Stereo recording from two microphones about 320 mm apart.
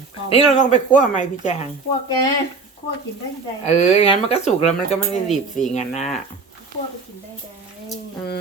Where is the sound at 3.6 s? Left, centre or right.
Left.